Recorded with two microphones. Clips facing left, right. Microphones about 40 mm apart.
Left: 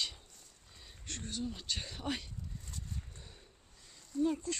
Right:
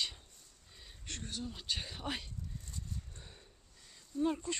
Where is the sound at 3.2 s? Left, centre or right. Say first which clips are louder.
Even; centre.